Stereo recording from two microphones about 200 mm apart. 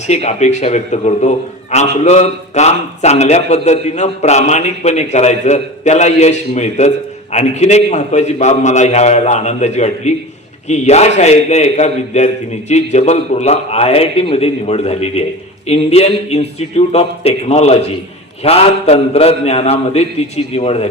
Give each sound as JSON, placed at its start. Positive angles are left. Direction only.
{"t": 0.1, "sound": "a man's voice", "side_deg": 35}